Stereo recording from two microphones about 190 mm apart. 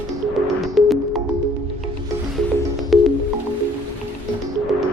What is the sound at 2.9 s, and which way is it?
Music, centre (ahead or behind).